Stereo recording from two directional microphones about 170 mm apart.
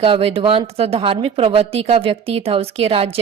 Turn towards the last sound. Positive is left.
turn(degrees=-35)  # may be behind; listen again after turning